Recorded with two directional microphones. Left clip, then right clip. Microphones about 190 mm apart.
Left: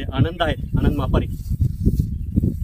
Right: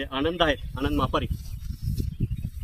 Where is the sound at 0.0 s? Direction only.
40° left (ahead or behind).